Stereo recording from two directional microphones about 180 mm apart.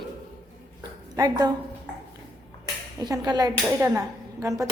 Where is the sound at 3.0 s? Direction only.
20° right (ahead or behind).